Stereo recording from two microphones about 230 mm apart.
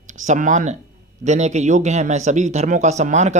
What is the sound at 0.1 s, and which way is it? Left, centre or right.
A man's voice, right.